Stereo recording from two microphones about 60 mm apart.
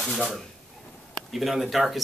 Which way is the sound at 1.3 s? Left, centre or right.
Centre.